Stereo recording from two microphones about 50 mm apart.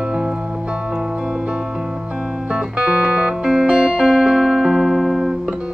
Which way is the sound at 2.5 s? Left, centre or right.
Centre.